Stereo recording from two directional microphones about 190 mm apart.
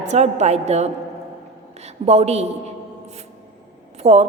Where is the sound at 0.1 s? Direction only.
35° right (ahead or behind).